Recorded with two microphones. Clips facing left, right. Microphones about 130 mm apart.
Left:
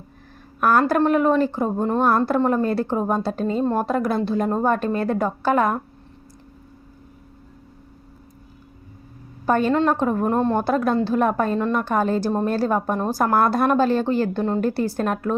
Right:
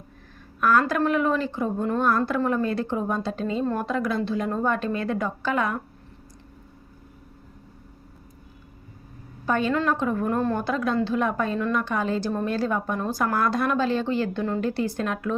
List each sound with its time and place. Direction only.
0.6 s a woman's voice: 50° left (ahead or behind)
3.8 s a woman's voice: 50° left (ahead or behind)
9.5 s a woman's voice: 45° left (ahead or behind); by 10.6 s 30° left (ahead or behind)
10.6 s a woman's voice: 50° left (ahead or behind)